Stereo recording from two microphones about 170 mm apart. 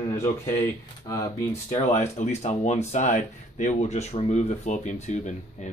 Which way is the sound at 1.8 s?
45° left (ahead or behind).